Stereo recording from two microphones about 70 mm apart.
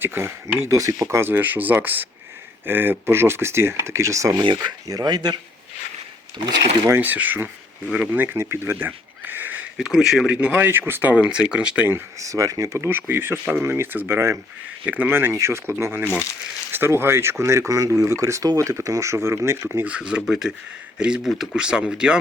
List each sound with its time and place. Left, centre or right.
0.0 s speech: right
0.6 s speech: right
4.4 s speech: right
4.9 s speech: right
6.8 s speech: right; by 8.2 s centre
8.2 s speech: right
9.2 s sniff: right
9.7 s speech: centre
10.2 s speech: centre
10.7 s speech: right
11.1 s speech: centre
12.2 s speech: right
19.8 s speech: centre